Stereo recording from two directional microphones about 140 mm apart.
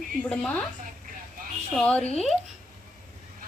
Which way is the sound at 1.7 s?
10° left (ahead or behind).